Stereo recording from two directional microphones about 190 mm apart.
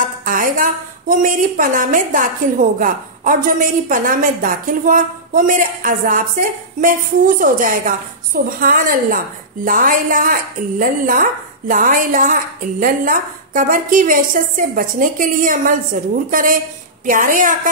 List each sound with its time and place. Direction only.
0.2 s a woman's voice: 45° right (ahead or behind)